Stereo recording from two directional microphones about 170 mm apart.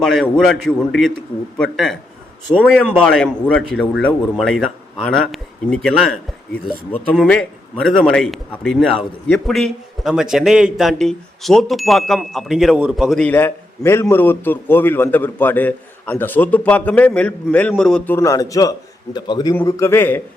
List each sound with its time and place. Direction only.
0.0 s a man's voice: centre (ahead or behind)
3.0 s a man's voice: 5° left (ahead or behind)